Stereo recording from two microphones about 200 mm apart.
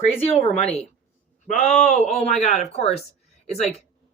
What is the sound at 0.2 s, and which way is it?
Speech, 30° left (ahead or behind).